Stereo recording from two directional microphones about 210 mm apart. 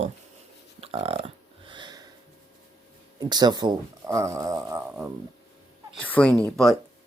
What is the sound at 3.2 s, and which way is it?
Speech, 20° right (ahead or behind).